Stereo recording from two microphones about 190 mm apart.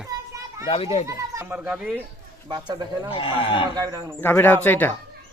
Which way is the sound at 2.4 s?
25° right (ahead or behind).